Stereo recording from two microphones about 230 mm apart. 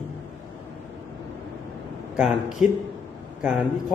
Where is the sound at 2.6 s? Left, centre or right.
Left.